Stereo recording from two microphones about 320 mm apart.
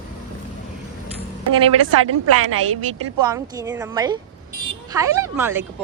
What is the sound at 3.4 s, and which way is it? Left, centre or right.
Speech, centre.